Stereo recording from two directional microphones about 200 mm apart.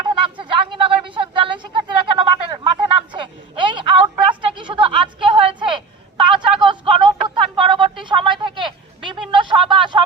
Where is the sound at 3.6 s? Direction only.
25° right (ahead or behind).